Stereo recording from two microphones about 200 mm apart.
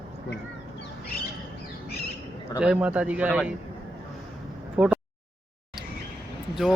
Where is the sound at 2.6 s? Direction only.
5° right (ahead or behind).